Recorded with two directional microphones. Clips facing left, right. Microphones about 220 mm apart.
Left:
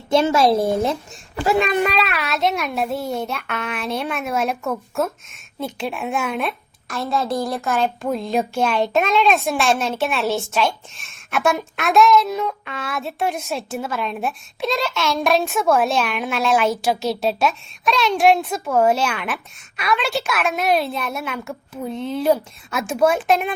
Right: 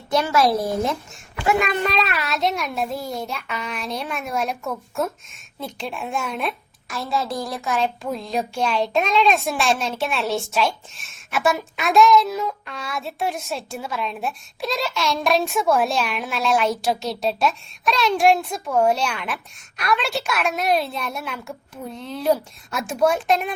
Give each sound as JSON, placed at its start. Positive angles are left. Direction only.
{"t": 0.1, "sound": "a woman's voice", "side_deg": 25}
{"t": 1.7, "sound": "a child's voice", "side_deg": 15}
{"t": 2.0, "sound": "a child's voice", "side_deg": 0}